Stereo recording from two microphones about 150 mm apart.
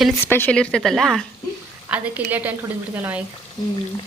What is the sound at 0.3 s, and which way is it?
A woman's voice, 15° left (ahead or behind).